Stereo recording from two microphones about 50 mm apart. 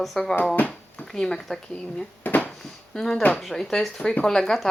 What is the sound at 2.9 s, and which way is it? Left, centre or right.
A child's voice, centre.